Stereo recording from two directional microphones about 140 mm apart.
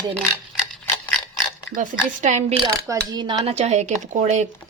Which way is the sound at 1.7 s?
55° right (ahead or behind).